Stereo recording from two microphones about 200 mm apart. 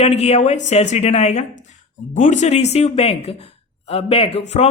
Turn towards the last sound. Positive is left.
turn(degrees=35)  # may be behind; listen again after turning